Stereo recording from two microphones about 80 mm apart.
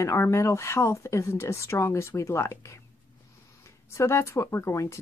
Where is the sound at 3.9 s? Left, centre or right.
Left.